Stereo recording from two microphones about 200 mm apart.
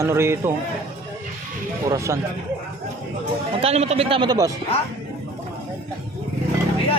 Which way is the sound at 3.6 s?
30° right (ahead or behind).